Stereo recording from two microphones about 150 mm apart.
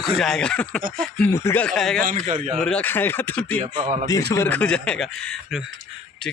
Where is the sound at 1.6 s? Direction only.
5° left (ahead or behind).